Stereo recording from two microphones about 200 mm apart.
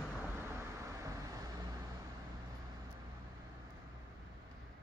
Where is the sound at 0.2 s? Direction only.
15° right (ahead or behind).